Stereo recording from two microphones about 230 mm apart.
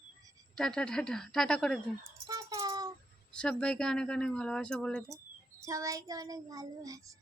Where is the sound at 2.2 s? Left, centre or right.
Centre.